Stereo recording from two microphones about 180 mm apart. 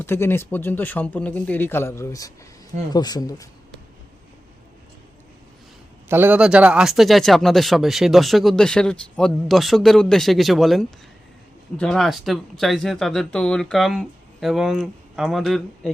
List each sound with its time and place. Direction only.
0.0 s speech: 15° left (ahead or behind)
6.1 s speech: 10° right (ahead or behind)